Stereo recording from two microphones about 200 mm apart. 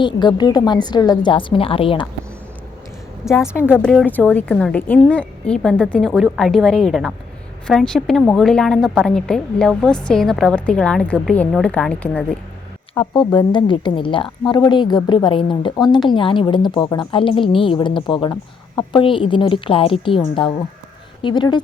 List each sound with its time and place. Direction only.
0.0 s a woman's voice: 20° left (ahead or behind)
3.4 s a woman's voice: 10° left (ahead or behind)
12.9 s a woman's voice: 20° left (ahead or behind)